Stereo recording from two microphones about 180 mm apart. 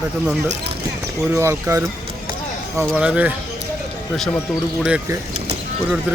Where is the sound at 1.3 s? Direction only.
15° right (ahead or behind).